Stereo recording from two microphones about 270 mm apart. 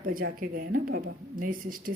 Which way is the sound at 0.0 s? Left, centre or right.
Right.